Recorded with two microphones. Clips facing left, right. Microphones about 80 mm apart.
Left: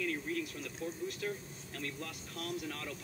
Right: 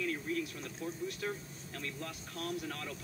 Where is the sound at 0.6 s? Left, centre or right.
Right.